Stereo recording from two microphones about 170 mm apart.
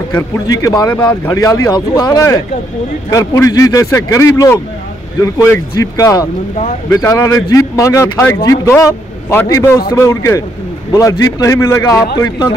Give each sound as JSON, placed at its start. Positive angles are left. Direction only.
{"t": 0.1, "sound": "a man's voice", "side_deg": 20}